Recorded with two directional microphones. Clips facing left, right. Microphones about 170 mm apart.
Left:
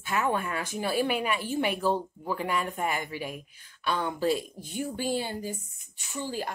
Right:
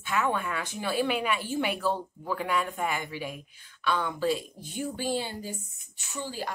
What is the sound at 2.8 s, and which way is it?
Speech, 45° left (ahead or behind).